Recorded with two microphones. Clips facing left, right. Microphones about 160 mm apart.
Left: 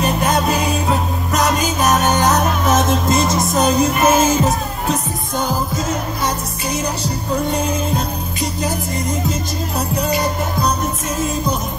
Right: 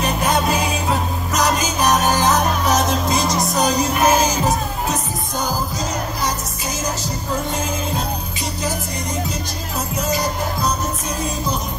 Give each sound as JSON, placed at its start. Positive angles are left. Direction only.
{"t": 0.0, "sound": "music", "side_deg": 0}
{"t": 9.9, "sound": "music", "side_deg": 60}